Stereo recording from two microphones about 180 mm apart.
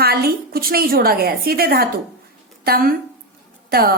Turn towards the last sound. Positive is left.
turn(degrees=-55)  # may be behind; listen again after turning